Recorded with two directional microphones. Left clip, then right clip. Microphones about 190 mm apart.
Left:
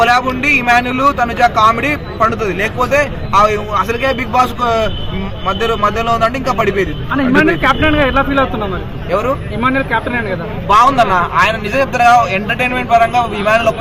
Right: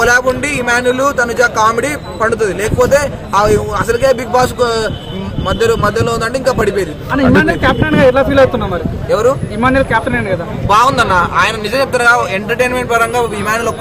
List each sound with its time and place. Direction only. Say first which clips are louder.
0.0 s a man's voice: right 1 dB; 5° right (ahead or behind)
5.5 s a man's voice: right 2 dB; 5° right (ahead or behind)
7.1 s a man's voice: right 2 dB; 55° right (ahead or behind)
10.7 s a man's voice: left 1 dB; 10° right (ahead or behind)